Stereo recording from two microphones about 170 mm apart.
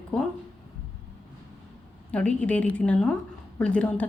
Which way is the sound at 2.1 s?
5° left (ahead or behind).